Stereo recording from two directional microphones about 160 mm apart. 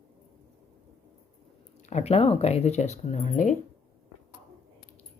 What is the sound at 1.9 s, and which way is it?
Speech, 45° left (ahead or behind).